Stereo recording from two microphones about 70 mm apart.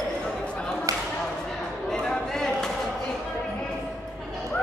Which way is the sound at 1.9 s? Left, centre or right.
Centre.